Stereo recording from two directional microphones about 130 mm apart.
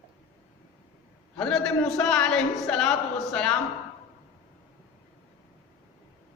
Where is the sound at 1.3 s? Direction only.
5° left (ahead or behind).